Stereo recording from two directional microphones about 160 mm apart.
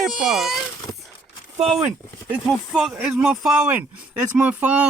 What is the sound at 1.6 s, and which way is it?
Speech, centre (ahead or behind).